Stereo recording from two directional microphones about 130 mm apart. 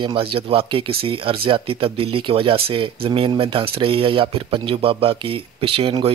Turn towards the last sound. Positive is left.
turn(degrees=-45)  # may be behind; listen again after turning